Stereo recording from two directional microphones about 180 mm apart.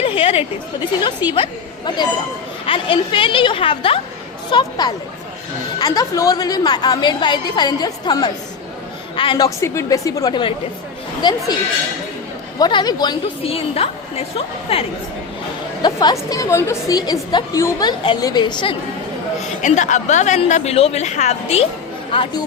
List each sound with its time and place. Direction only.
0.0 s a sound: 30° left (ahead or behind)
1.3 s a woman's voice: 25° left (ahead or behind)
5.8 s a woman's voice: 20° left (ahead or behind)
9.6 s a woman's voice: 15° left (ahead or behind)
12.5 s a woman's voice: 25° left (ahead or behind)
15.8 s a woman's voice: 25° left (ahead or behind)
19.6 s a woman's voice: 45° left (ahead or behind)